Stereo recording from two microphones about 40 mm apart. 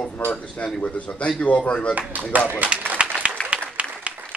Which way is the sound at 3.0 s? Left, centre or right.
Right.